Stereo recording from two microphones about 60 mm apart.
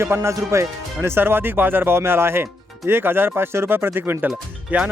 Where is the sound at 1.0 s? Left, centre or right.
Right.